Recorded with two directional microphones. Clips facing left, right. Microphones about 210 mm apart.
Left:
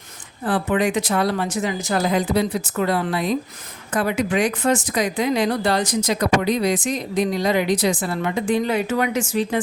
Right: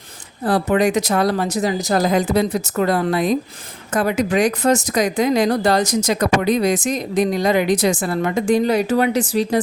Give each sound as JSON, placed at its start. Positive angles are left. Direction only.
{"t": 0.4, "sound": "speech", "side_deg": -40}